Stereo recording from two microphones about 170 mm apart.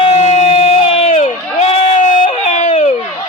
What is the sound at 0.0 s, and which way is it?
Crowd, 40° left (ahead or behind).